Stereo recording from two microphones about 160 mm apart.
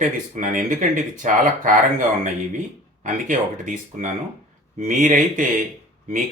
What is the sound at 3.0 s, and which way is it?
Speech, 50° right (ahead or behind).